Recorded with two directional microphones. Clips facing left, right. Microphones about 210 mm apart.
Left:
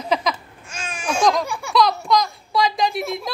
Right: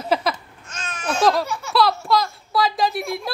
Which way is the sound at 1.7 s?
5° right (ahead or behind).